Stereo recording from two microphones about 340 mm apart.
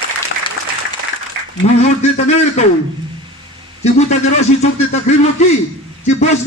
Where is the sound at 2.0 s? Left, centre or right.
Centre.